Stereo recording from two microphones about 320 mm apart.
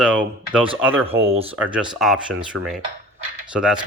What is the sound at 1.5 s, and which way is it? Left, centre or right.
Speech, centre.